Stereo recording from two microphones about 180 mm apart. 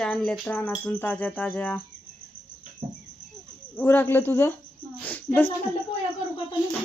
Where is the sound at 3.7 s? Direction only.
10° left (ahead or behind).